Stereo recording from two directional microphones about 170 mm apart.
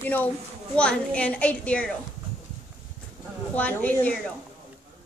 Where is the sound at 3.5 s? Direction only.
10° left (ahead or behind).